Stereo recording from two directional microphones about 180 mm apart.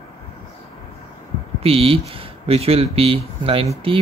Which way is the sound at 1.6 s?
30° right (ahead or behind).